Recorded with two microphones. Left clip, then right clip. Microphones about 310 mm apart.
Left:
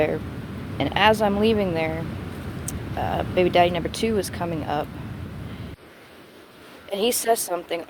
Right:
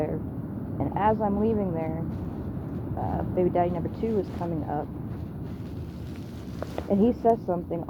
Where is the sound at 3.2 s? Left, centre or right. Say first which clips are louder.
Left 7 dB; left.